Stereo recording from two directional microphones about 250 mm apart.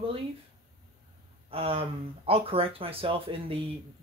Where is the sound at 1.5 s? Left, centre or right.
Right.